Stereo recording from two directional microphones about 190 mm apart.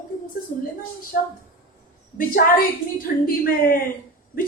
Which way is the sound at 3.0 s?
50° left (ahead or behind).